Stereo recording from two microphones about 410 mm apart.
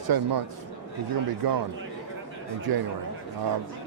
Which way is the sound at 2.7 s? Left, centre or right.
Right.